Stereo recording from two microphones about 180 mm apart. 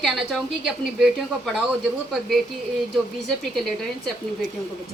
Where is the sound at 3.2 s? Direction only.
Centre (ahead or behind).